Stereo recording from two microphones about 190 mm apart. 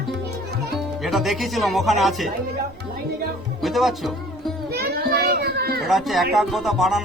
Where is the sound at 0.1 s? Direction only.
60° right (ahead or behind).